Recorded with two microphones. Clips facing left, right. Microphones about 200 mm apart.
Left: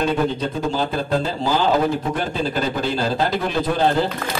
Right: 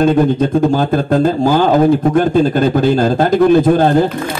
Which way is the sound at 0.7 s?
50° right (ahead or behind).